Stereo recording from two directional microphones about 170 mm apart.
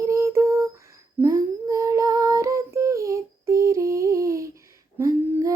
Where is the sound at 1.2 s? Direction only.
20° right (ahead or behind).